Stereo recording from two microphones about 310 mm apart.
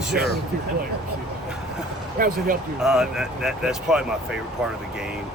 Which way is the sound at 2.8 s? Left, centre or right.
Centre.